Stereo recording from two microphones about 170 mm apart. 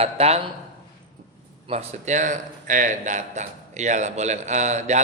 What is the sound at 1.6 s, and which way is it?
A man's voice, 40° right (ahead or behind).